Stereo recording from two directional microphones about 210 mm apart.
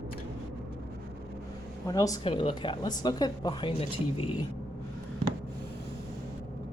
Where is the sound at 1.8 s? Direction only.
15° left (ahead or behind).